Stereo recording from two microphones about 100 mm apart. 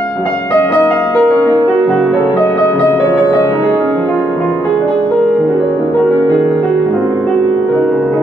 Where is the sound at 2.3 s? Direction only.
25° left (ahead or behind).